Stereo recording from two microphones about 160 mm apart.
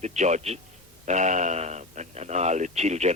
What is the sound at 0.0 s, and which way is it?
Speech, 45° right (ahead or behind).